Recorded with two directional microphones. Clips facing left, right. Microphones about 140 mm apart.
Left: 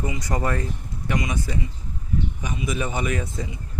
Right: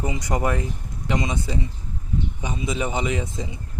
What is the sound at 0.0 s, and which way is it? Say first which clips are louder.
Speech: right 2 dB; 20° right (ahead or behind).